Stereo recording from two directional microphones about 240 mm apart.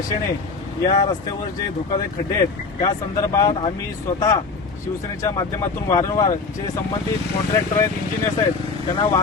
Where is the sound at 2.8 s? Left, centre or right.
Centre.